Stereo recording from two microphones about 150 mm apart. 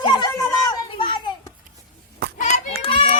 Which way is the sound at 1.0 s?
35° left (ahead or behind).